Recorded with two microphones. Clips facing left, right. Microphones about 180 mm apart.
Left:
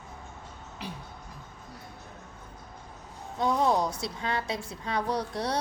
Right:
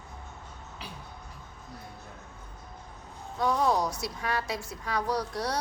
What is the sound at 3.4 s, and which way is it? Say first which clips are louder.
A woman's voice: left 1 dB; 25° left (ahead or behind).